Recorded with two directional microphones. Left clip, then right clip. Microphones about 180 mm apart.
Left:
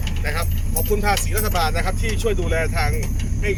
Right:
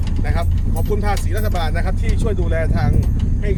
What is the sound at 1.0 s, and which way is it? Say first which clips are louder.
Speech: left 2 dB; 35° right (ahead or behind).